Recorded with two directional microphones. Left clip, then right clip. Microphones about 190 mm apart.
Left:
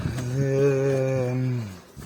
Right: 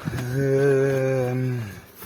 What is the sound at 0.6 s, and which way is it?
Mantra, 15° right (ahead or behind).